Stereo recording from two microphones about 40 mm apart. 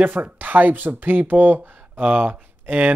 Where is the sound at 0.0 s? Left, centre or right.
Right.